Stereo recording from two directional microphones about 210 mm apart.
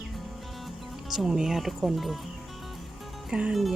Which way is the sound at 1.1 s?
Centre (ahead or behind).